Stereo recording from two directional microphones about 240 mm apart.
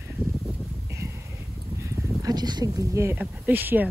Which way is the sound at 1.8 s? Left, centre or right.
Centre.